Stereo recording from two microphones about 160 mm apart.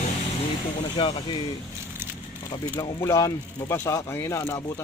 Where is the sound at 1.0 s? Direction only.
35° left (ahead or behind).